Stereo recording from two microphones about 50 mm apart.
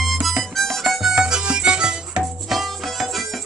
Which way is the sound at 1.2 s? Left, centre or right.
Centre.